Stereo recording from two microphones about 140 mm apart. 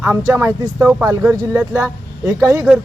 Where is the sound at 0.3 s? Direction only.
15° right (ahead or behind).